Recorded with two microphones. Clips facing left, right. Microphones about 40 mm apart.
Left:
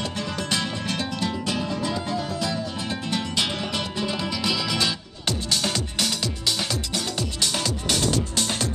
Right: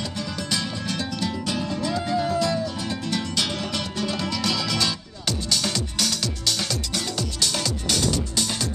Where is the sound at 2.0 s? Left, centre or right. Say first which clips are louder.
Right 4 dB; centre.